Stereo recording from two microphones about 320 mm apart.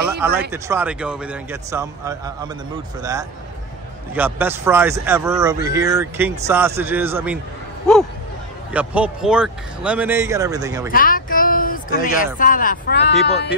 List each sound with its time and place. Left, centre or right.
0.5 s speech: centre
8.7 s speech: centre
10.9 s a sound: left
12.4 s speech: left